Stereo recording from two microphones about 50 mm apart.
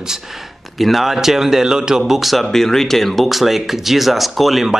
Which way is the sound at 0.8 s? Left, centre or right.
Centre.